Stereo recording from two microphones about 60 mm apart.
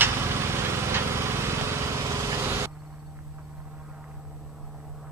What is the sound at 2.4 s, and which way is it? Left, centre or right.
Vehicle, right.